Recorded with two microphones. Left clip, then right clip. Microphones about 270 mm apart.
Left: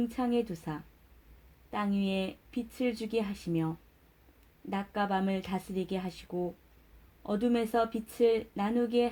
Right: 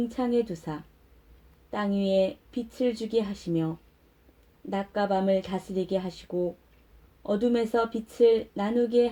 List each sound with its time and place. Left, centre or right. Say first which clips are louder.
0.1 s speech: right 5 dB; left
4.9 s speech: right 7 dB; left